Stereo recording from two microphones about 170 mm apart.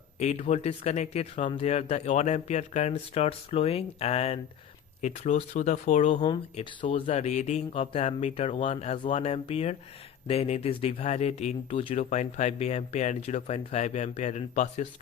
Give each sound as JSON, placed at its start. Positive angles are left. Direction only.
{"t": 0.2, "sound": "speech", "side_deg": 40}
{"t": 6.2, "sound": "speech", "side_deg": 30}
{"t": 7.1, "sound": "speech", "side_deg": 45}